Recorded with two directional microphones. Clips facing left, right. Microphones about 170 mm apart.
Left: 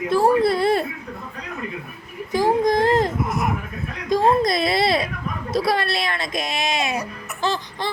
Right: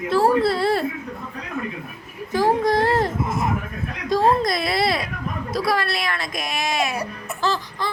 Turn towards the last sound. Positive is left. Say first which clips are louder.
# even
turn(degrees=20)  # may be behind; listen again after turning